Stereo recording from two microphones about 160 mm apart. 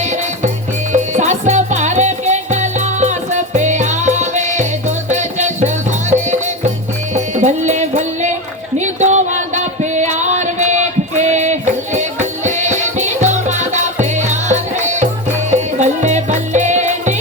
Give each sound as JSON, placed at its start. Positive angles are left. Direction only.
{"t": 0.9, "sound": "music", "side_deg": -45}
{"t": 8.8, "sound": "a sound", "side_deg": -45}
{"t": 9.9, "sound": "music", "side_deg": -50}